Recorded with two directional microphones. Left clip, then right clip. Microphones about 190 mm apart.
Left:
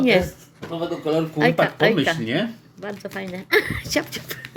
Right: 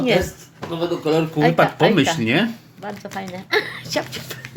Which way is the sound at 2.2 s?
35° right (ahead or behind).